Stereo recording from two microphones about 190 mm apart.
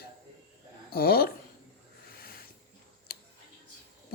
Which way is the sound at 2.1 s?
50° left (ahead or behind).